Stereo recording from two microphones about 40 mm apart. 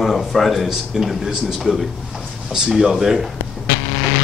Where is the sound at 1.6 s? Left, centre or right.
Centre.